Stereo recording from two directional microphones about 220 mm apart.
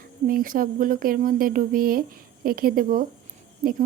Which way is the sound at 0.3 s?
40° right (ahead or behind).